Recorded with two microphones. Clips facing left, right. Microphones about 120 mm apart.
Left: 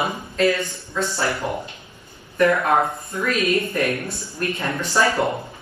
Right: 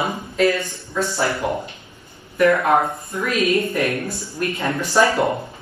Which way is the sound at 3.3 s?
25° right (ahead or behind).